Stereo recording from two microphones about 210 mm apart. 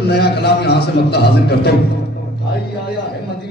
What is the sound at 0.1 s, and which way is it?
A man's voice, 50° left (ahead or behind).